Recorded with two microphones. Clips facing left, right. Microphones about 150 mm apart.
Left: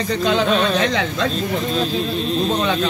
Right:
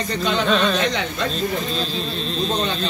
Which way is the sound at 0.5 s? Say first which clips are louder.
Left 1 dB; 5° left (ahead or behind).